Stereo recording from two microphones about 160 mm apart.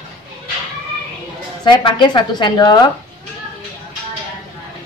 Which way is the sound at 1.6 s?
30° left (ahead or behind).